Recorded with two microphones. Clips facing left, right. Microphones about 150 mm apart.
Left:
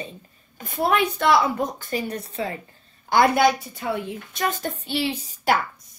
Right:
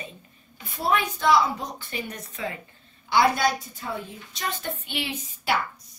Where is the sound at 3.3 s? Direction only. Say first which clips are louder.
Left 6 dB; 75° left (ahead or behind).